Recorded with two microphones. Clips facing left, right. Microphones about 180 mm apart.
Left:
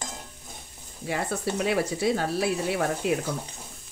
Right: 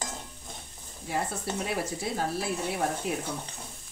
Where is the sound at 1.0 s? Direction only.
80° left.